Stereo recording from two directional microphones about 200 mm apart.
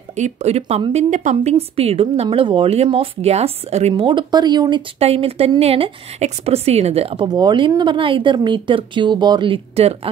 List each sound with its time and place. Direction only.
0.1 s speech: 35° right (ahead or behind)